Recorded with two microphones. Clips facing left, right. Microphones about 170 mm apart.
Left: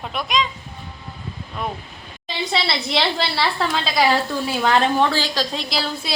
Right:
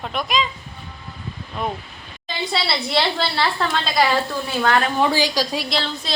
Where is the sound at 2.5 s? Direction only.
Centre (ahead or behind).